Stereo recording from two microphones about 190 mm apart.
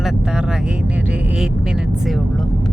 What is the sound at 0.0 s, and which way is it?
Vehicle, centre (ahead or behind).